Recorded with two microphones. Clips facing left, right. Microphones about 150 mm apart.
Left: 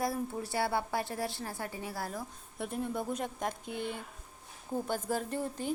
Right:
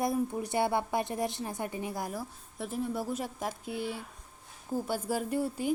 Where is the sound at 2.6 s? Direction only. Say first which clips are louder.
Right 1 dB; centre (ahead or behind).